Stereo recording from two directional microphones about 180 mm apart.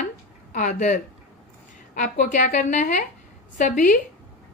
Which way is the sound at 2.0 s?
45° left (ahead or behind).